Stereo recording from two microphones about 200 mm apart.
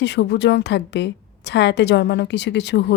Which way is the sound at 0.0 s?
60° left (ahead or behind).